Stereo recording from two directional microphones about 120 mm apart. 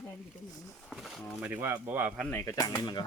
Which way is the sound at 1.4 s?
15° right (ahead or behind).